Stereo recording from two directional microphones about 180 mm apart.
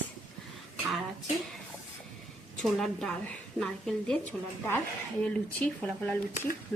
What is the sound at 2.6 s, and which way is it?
A woman's voice, centre (ahead or behind).